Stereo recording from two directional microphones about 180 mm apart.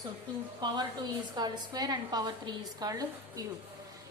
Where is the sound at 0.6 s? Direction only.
25° right (ahead or behind).